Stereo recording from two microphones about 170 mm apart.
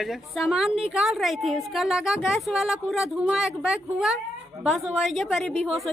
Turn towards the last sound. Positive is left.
turn(degrees=0)  # may be behind; listen again after turning